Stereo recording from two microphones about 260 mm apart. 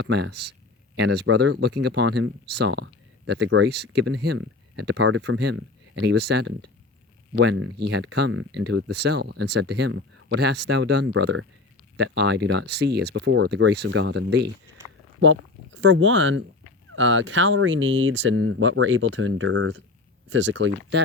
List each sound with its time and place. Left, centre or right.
0.0 s speech: right